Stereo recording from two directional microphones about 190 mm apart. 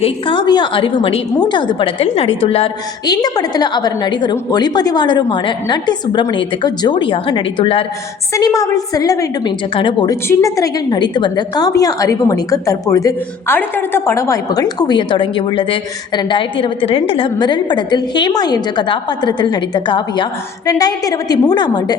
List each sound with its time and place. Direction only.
0.0 s a woman's voice: 25° left (ahead or behind)
3.1 s a woman's voice: 20° left (ahead or behind)
8.3 s a woman's voice: 15° left (ahead or behind)